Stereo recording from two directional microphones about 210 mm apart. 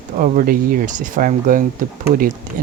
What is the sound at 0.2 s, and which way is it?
Speech, 40° right (ahead or behind).